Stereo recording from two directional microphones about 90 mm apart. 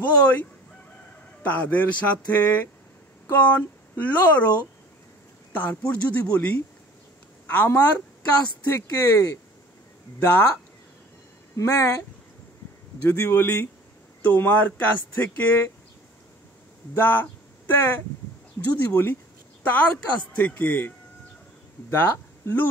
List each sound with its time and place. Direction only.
0.0 s speech: 20° left (ahead or behind)
5.5 s a man's voice: 20° left (ahead or behind)
11.5 s speech: 35° left (ahead or behind)
13.1 s speech: 25° left (ahead or behind)
16.9 s speech: 20° left (ahead or behind)
21.9 s speech: 25° left (ahead or behind)